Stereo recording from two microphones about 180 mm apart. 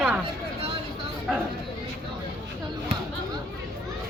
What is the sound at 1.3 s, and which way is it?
Speech, centre (ahead or behind).